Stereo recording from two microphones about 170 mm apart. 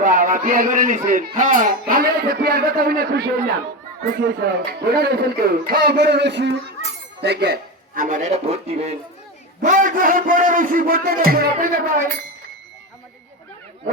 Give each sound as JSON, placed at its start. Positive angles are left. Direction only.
{"t": 0.0, "sound": "music", "side_deg": -50}
{"t": 1.4, "sound": "speech", "side_deg": -50}
{"t": 1.9, "sound": "a man's voice", "side_deg": -60}
{"t": 7.2, "sound": "a man's voice", "side_deg": -75}